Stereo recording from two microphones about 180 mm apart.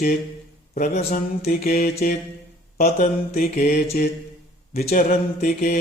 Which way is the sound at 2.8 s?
40° left (ahead or behind).